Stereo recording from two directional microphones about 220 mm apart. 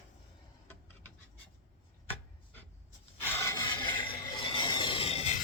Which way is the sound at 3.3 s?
15° left (ahead or behind).